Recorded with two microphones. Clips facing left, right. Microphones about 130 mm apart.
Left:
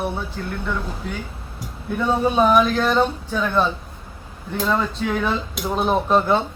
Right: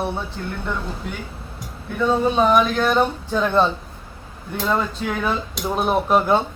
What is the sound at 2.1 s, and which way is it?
Speech, 5° left (ahead or behind).